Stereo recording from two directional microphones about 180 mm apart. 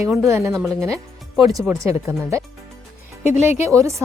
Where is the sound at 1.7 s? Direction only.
15° right (ahead or behind).